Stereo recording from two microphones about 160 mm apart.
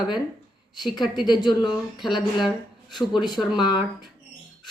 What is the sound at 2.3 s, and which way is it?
Speech, centre (ahead or behind).